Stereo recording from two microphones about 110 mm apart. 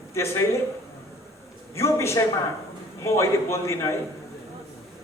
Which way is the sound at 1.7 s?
25° left (ahead or behind).